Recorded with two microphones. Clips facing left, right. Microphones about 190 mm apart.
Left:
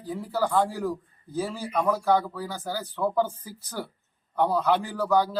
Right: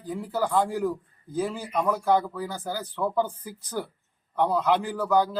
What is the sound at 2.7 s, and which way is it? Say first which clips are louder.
Speech: left 1 dB; 10° left (ahead or behind).